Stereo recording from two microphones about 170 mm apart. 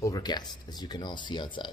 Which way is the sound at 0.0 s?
25° left (ahead or behind).